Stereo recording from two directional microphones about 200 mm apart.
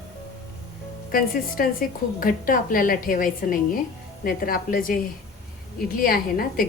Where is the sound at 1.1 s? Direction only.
45° left (ahead or behind).